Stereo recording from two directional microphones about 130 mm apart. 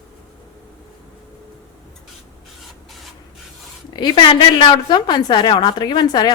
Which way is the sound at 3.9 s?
35° left (ahead or behind).